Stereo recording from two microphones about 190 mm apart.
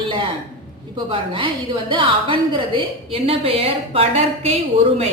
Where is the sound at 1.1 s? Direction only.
25° right (ahead or behind).